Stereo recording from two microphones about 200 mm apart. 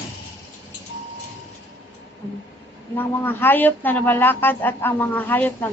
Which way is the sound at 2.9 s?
10° left (ahead or behind).